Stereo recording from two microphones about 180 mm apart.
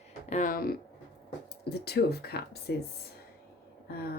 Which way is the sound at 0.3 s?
45° left (ahead or behind).